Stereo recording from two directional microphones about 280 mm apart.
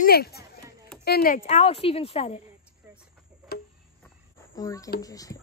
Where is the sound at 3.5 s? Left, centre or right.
Left.